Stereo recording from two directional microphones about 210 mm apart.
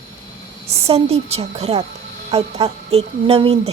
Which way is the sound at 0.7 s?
30° right (ahead or behind).